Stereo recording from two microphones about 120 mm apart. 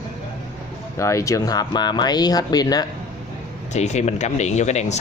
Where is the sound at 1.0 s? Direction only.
25° left (ahead or behind).